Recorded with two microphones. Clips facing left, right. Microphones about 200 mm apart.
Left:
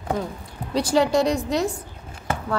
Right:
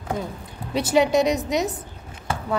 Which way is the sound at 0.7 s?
20° right (ahead or behind).